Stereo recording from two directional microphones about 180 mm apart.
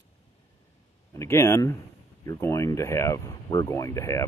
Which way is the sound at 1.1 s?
15° left (ahead or behind).